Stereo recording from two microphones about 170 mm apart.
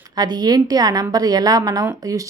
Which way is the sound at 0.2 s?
25° right (ahead or behind).